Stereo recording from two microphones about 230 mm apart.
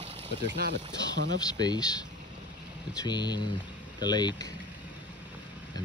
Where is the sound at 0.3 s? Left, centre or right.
Right.